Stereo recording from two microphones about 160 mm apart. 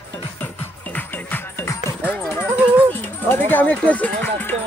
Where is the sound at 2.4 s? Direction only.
10° right (ahead or behind).